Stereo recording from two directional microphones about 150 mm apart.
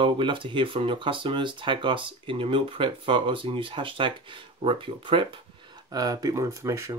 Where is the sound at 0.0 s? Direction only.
35° right (ahead or behind).